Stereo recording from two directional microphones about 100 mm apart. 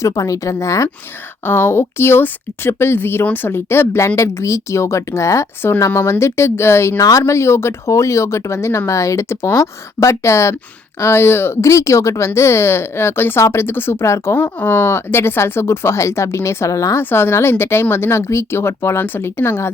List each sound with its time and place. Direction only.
0.0 s speech: 35° left (ahead or behind)